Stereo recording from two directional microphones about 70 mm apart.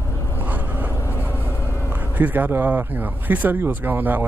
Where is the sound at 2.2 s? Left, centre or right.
Right.